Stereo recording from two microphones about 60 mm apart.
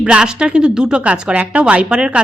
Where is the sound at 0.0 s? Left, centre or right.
Centre.